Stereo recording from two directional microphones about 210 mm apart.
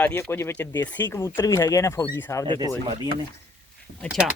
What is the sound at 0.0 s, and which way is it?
Speech, 10° left (ahead or behind).